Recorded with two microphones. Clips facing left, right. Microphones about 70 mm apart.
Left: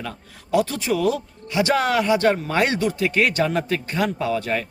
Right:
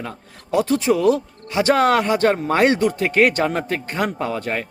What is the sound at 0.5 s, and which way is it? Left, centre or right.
Speech, right.